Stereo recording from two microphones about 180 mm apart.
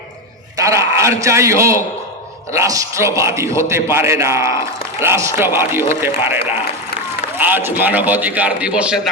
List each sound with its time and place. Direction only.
0.5 s a man's voice: 15° right (ahead or behind)